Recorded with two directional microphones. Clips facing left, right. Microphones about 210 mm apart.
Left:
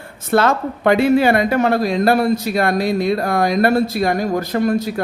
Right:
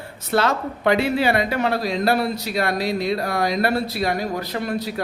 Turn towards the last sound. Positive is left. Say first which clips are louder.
# left 7 dB
turn(degrees=45)  # may be behind; listen again after turning